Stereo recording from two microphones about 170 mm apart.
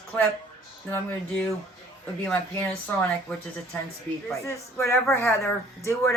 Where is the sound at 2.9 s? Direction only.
10° left (ahead or behind).